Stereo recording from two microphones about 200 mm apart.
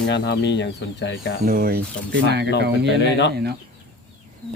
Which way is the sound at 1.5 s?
45° right (ahead or behind).